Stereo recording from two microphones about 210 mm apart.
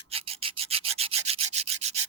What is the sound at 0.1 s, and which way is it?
Rub, 25° right (ahead or behind).